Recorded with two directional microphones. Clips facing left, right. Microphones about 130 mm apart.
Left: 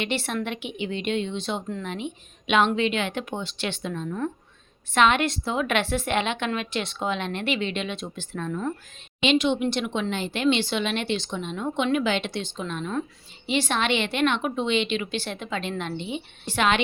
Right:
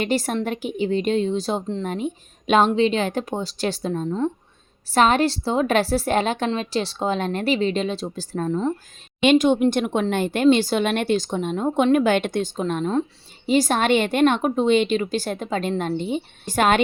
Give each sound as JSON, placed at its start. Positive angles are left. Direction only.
{"t": 0.0, "sound": "a woman's voice", "side_deg": -40}